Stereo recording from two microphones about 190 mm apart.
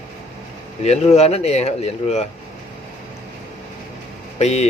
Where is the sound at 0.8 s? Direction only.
35° left (ahead or behind).